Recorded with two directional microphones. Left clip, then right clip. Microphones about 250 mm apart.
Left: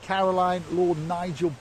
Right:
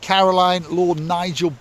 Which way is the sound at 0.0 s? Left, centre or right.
Right.